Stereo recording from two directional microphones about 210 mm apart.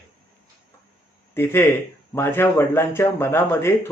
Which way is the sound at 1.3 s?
10° left (ahead or behind).